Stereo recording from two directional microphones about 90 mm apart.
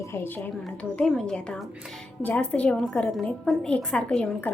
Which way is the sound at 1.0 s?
5° left (ahead or behind).